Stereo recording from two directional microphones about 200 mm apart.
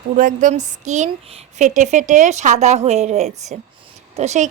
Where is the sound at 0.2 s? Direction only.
40° right (ahead or behind).